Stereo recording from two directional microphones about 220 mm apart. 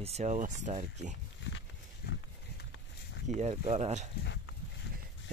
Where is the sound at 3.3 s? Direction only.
30° right (ahead or behind).